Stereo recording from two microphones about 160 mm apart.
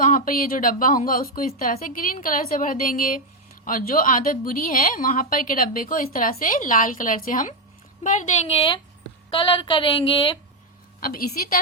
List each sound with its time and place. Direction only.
0.0 s a woman's voice: 60° left (ahead or behind)
9.3 s speech: 30° left (ahead or behind)
11.0 s a woman's voice: 60° left (ahead or behind)